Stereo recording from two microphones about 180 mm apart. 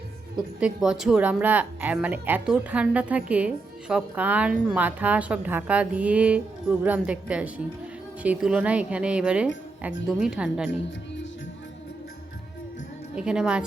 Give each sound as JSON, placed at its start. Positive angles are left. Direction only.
{"t": 0.6, "sound": "a woman's voice", "side_deg": -5}
{"t": 10.7, "sound": "a woman's voice", "side_deg": 90}
{"t": 13.1, "sound": "speech", "side_deg": -5}